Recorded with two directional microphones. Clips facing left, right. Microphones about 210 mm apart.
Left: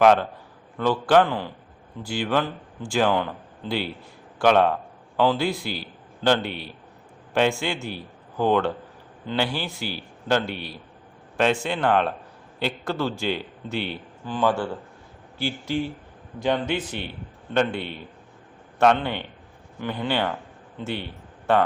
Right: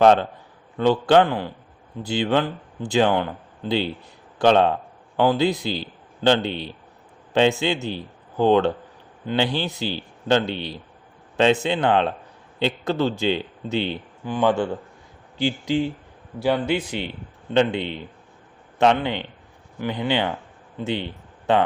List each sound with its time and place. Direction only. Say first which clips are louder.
0.0 s a man's voice: right 2 dB; 25° right (ahead or behind)
19.0 s a man's voice: right 3 dB; 15° right (ahead or behind)